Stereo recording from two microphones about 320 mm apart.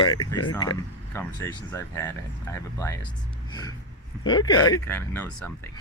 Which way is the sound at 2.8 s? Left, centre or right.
Centre.